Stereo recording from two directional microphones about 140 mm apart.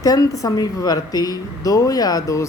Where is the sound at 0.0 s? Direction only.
25° left (ahead or behind).